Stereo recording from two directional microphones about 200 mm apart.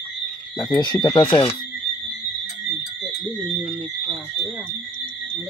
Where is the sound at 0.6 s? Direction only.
20° left (ahead or behind).